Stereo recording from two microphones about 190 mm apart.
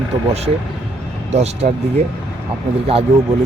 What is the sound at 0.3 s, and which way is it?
Speech, 35° right (ahead or behind).